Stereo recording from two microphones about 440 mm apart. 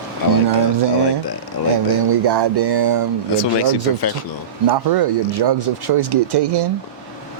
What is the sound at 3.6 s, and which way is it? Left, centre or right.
Speech, left.